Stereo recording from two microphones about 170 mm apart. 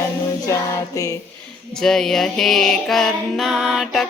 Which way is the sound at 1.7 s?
5° left (ahead or behind).